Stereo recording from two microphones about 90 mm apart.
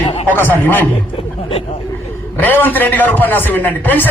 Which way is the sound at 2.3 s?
20° left (ahead or behind).